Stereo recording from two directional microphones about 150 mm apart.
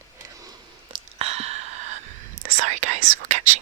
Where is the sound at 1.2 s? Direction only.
45° right (ahead or behind).